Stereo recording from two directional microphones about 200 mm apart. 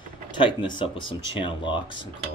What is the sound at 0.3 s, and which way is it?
Speech, 25° left (ahead or behind).